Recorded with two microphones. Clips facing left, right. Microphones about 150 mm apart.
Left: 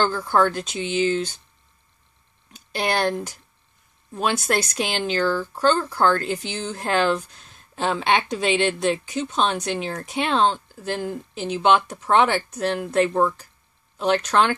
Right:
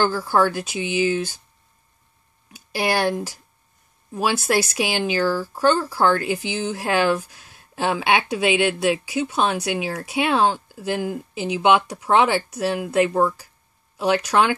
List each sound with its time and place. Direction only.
0.0 s speech: 10° right (ahead or behind)
2.5 s speech: 10° right (ahead or behind)